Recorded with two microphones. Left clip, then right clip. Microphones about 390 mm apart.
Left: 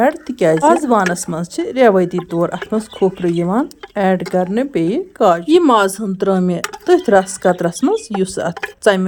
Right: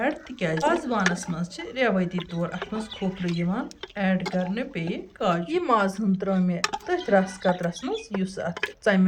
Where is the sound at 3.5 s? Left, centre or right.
Centre.